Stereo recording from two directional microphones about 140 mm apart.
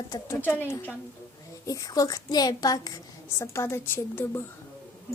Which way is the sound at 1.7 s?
25° left (ahead or behind).